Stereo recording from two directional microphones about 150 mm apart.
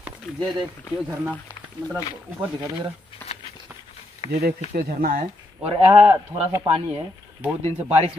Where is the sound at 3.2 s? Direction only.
10° left (ahead or behind).